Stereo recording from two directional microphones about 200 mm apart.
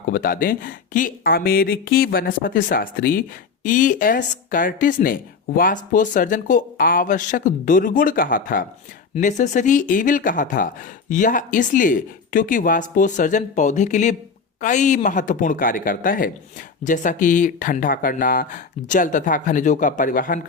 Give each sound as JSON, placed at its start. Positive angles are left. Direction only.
{"t": 0.1, "sound": "speech", "side_deg": 45}